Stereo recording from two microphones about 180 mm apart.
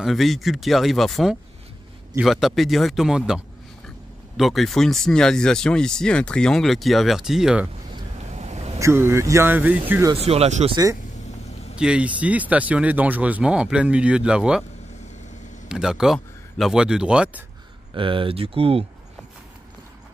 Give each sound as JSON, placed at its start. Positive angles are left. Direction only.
{"t": 0.0, "sound": "speech", "side_deg": 0}
{"t": 8.3, "sound": "a sound", "side_deg": -40}
{"t": 8.7, "sound": "speech", "side_deg": -15}
{"t": 10.1, "sound": "speech", "side_deg": -35}
{"t": 11.8, "sound": "speech", "side_deg": -5}
{"t": 15.7, "sound": "speech", "side_deg": -5}
{"t": 17.9, "sound": "speech", "side_deg": -30}